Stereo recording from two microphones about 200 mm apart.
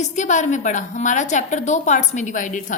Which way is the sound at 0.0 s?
35° left (ahead or behind).